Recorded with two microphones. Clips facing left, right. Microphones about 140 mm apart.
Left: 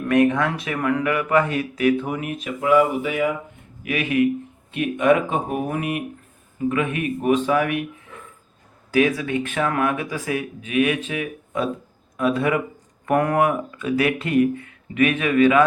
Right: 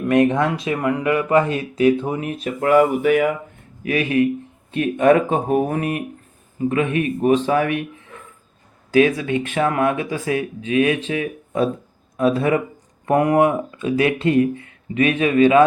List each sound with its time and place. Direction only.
0.1 s speech: 25° right (ahead or behind)
2.6 s speech: 50° right (ahead or behind)
3.8 s speech: 35° right (ahead or behind)
8.9 s speech: 30° right (ahead or behind)
13.1 s speech: 20° right (ahead or behind)